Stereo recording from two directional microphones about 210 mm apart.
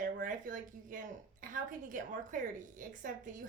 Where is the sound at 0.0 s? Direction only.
40° right (ahead or behind).